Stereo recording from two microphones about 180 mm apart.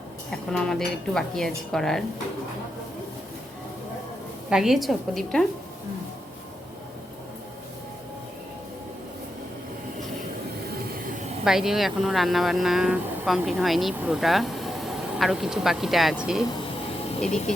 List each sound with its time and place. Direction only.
0.3 s speech: 5° left (ahead or behind)
4.4 s speech: 5° right (ahead or behind)
11.4 s speech: centre (ahead or behind)
17.2 s speech: 40° left (ahead or behind)